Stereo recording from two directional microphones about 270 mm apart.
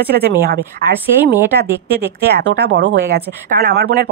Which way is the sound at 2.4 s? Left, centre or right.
Right.